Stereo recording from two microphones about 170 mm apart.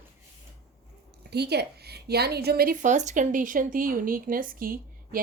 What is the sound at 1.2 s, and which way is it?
A woman's voice, 75° right (ahead or behind).